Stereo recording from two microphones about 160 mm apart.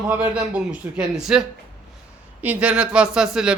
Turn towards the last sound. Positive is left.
turn(degrees=-5)  # may be behind; listen again after turning